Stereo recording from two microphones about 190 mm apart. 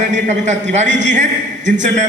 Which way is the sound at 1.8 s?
40° right (ahead or behind).